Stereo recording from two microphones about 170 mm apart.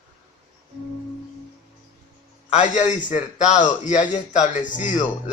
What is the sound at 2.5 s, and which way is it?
A man's voice, 45° left (ahead or behind).